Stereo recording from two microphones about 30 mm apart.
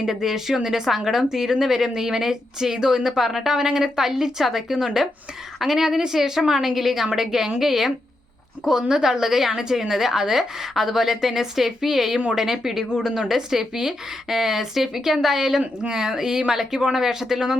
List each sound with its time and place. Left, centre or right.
0.0 s a woman's voice: centre